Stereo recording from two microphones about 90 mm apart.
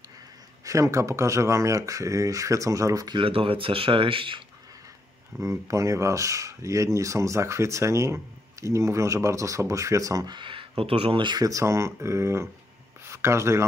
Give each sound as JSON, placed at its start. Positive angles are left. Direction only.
{"t": 0.7, "sound": "speech", "side_deg": -35}
{"t": 3.2, "sound": "speech", "side_deg": -90}
{"t": 5.4, "sound": "speech", "side_deg": -35}
{"t": 10.3, "sound": "a sound", "side_deg": -65}
{"t": 10.8, "sound": "speech", "side_deg": -90}
{"t": 11.4, "sound": "speech", "side_deg": -35}